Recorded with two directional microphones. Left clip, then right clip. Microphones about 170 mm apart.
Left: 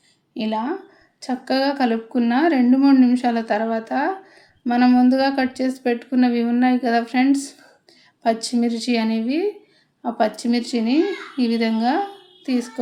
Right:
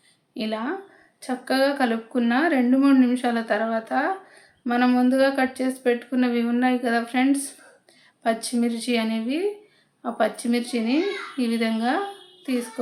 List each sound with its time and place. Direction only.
0.3 s speech: 20° left (ahead or behind)